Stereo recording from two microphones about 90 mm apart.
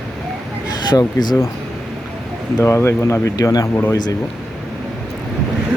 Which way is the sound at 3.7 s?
25° left (ahead or behind).